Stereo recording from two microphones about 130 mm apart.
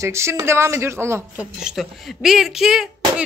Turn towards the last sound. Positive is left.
turn(degrees=-5)  # may be behind; listen again after turning